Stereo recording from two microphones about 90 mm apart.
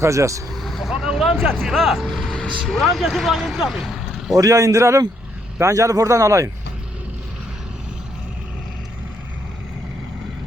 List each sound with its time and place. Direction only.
0.0 s speech: 35° right (ahead or behind)
0.5 s speech: centre (ahead or behind)
4.4 s speech: 40° right (ahead or behind)